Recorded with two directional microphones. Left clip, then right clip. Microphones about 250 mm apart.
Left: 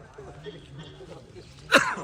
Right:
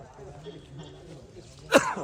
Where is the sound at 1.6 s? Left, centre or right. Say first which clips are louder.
Left 1 dB; right.